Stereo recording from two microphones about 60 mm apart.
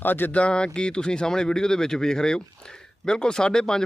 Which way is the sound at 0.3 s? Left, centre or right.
Centre.